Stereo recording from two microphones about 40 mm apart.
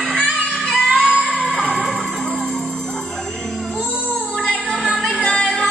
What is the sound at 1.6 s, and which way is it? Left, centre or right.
Music, left.